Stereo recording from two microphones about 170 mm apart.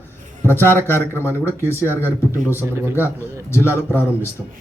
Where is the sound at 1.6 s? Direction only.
15° right (ahead or behind).